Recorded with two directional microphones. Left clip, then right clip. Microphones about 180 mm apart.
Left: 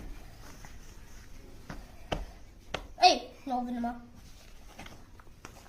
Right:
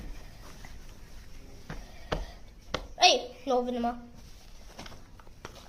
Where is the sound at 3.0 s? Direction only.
30° right (ahead or behind).